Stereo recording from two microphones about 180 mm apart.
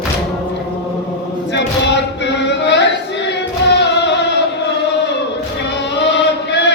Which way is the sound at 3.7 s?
75° left (ahead or behind).